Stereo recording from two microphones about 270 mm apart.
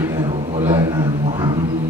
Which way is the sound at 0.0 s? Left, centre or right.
Centre.